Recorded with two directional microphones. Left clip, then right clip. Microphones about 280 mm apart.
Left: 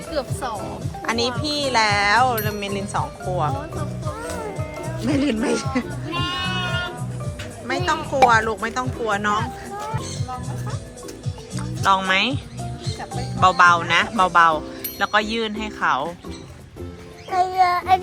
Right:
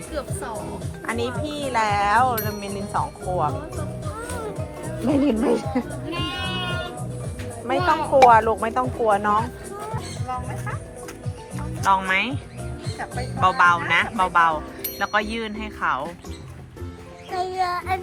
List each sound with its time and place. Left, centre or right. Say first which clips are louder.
1.0 s speech: left 4 dB; centre
5.0 s speech: right 1 dB; centre
6.4 s music: left 3 dB; centre
7.7 s speech: right 3 dB; centre
11.5 s speech: left 1 dB; centre
17.3 s music: left 6 dB; centre